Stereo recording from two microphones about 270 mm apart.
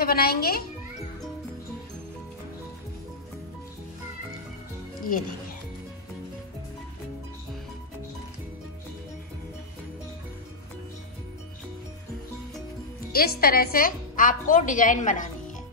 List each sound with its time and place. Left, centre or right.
0.0 s speech: left
13.1 s a woman's voice: left